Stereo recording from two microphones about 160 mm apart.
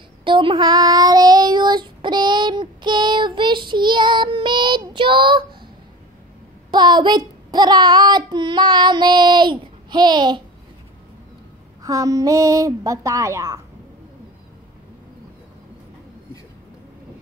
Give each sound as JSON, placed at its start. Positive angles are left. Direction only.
{"t": 0.2, "sound": "child singing", "side_deg": -30}
{"t": 6.7, "sound": "child singing", "side_deg": -30}
{"t": 11.8, "sound": "a woman's voice", "side_deg": -20}